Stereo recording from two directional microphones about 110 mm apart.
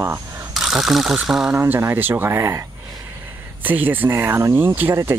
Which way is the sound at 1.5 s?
20° right (ahead or behind).